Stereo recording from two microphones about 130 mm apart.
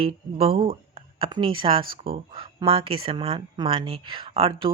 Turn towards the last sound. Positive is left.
turn(degrees=-45)  # may be behind; listen again after turning